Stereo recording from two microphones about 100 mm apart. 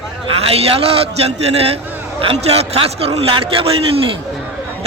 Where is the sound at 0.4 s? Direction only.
75° right (ahead or behind).